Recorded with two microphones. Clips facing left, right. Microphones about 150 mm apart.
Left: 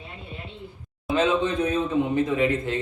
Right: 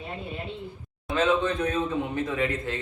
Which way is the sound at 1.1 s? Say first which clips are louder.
Left 2 dB; 20° left (ahead or behind).